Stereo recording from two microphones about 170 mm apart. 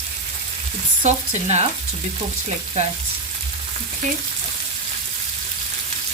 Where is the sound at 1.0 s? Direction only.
40° right (ahead or behind).